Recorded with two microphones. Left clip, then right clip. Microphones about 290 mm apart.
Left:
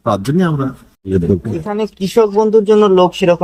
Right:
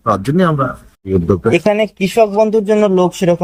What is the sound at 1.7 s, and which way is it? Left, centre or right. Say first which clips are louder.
Speech: right 5 dB; right.